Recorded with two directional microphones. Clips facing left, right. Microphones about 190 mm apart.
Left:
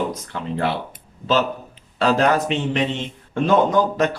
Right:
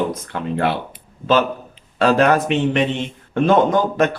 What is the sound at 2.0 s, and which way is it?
Speech, 60° right (ahead or behind).